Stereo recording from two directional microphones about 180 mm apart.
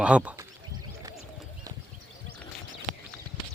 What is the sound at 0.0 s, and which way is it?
Speech, 5° right (ahead or behind).